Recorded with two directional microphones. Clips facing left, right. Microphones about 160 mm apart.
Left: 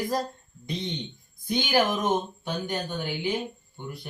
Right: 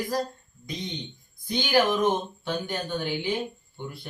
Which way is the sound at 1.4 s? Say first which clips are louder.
Right 1 dB; 15° left (ahead or behind).